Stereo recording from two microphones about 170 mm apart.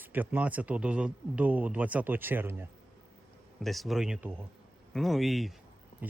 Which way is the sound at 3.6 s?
Centre (ahead or behind).